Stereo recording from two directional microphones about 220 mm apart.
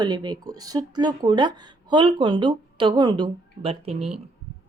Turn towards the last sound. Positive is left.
turn(degrees=-25)  # may be behind; listen again after turning